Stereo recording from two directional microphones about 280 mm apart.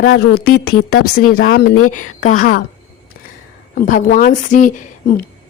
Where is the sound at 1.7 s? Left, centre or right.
Left.